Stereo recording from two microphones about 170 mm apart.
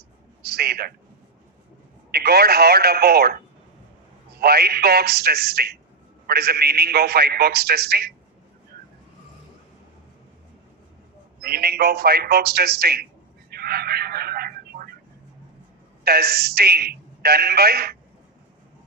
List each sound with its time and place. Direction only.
0.4 s a man's voice: 65° right (ahead or behind)
2.1 s a man's voice: 65° right (ahead or behind)
11.4 s a man's voice: 65° right (ahead or behind)
13.5 s a sound: 65° right (ahead or behind)
16.0 s a man's voice: 65° right (ahead or behind)